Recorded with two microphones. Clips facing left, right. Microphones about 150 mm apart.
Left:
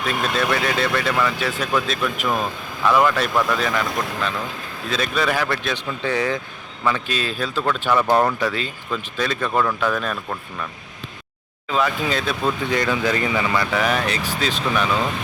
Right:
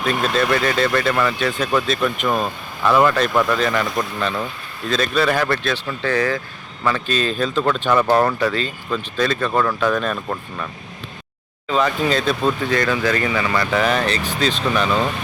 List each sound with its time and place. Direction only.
0.0 s speech: centre (ahead or behind)
5.7 s speech: 15° left (ahead or behind); by 10.7 s centre (ahead or behind)
11.7 s speech: 5° left (ahead or behind)